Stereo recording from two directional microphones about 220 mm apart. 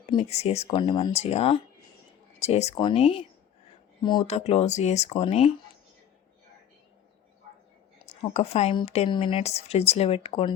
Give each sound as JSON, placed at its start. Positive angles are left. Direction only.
{"t": 0.1, "sound": "speech", "side_deg": 25}
{"t": 8.0, "sound": "speech", "side_deg": 30}